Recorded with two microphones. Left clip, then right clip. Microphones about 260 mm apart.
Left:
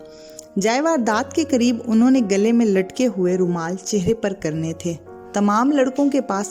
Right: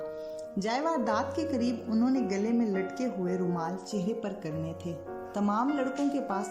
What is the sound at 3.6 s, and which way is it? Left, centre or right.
Speech, left.